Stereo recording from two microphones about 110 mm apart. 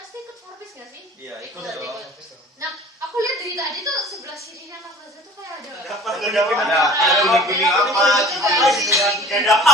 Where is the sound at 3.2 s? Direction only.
30° right (ahead or behind).